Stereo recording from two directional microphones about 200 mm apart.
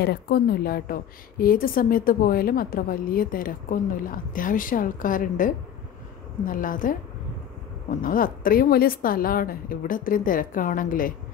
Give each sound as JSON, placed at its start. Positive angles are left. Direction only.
{"t": 0.0, "sound": "a woman's voice", "side_deg": 55}
{"t": 8.0, "sound": "a woman's voice", "side_deg": 45}